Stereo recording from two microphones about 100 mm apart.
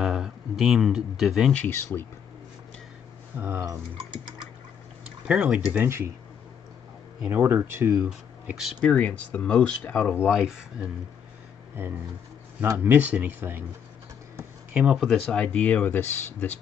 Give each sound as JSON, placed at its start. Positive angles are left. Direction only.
{"t": 0.0, "sound": "a sound", "side_deg": -5}
{"t": 1.5, "sound": "speech", "side_deg": 25}
{"t": 3.3, "sound": "speech", "side_deg": -25}
{"t": 5.0, "sound": "speech", "side_deg": -10}
{"t": 7.2, "sound": "speech", "side_deg": -20}
{"t": 8.8, "sound": "speech", "side_deg": 15}
{"t": 10.2, "sound": "speech", "side_deg": 0}
{"t": 12.7, "sound": "speech", "side_deg": -20}
{"t": 14.7, "sound": "speech", "side_deg": -10}
{"t": 15.0, "sound": "speech", "side_deg": 10}